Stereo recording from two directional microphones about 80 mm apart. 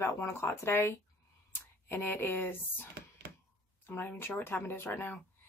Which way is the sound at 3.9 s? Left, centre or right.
Left.